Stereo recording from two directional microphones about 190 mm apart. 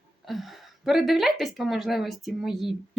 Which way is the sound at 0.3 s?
Centre (ahead or behind).